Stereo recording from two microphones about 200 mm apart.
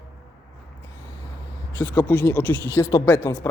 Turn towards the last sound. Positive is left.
turn(degrees=10)  # may be behind; listen again after turning